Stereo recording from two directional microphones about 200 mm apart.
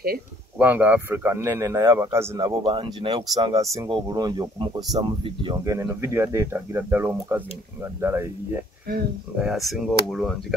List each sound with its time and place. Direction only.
0.6 s a man's voice: 10° right (ahead or behind)
9.4 s speech: centre (ahead or behind)